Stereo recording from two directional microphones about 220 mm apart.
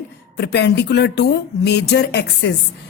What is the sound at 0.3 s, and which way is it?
A woman's voice, 50° left (ahead or behind).